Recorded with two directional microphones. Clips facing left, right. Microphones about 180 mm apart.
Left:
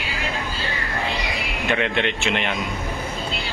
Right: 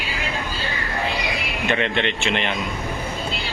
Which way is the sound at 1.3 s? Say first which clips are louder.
Right 1 dB; centre (ahead or behind).